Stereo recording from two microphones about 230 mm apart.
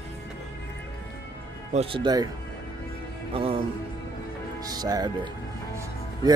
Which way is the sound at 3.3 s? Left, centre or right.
Right.